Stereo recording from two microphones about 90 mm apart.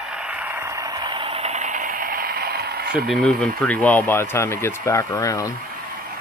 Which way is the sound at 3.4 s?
15° left (ahead or behind).